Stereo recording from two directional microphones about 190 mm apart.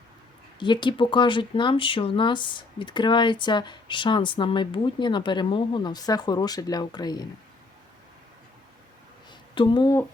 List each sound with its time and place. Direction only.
0.6 s speech: 25° left (ahead or behind)
9.6 s speech: 25° left (ahead or behind)